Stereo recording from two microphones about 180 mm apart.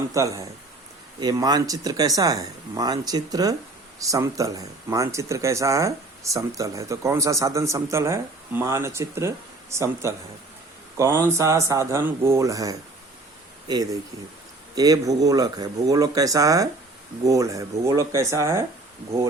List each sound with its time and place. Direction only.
0.1 s speech: 20° right (ahead or behind)